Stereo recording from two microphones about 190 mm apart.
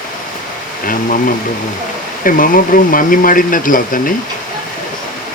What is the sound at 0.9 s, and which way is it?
Speech, 45° left (ahead or behind).